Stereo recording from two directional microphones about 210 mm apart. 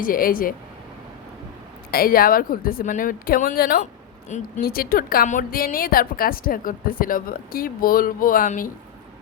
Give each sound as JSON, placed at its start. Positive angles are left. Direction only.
{"t": 0.0, "sound": "a woman's voice", "side_deg": 40}
{"t": 1.9, "sound": "a woman's voice", "side_deg": 45}